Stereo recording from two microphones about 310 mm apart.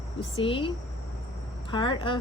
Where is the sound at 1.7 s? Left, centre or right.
Centre.